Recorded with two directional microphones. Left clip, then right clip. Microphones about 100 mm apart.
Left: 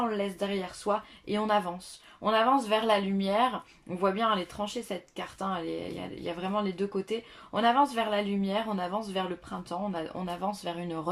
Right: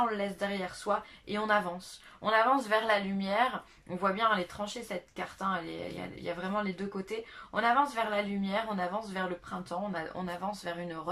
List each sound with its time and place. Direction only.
0.2 s speech: 25° left (ahead or behind)